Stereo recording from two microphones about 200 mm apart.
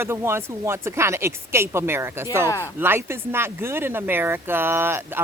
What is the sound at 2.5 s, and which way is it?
Speech, 15° left (ahead or behind).